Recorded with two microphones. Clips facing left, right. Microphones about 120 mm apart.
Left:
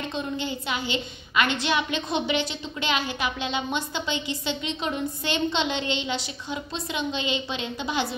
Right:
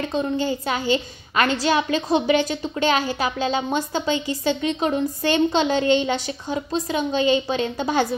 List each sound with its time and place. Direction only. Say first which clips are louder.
0.1 s a woman's voice: right 9 dB; 40° right (ahead or behind)